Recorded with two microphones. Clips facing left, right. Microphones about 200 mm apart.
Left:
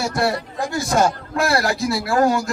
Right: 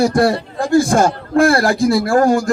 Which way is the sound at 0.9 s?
50° right (ahead or behind).